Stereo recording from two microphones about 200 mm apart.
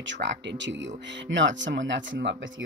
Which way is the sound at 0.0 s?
65° right (ahead or behind).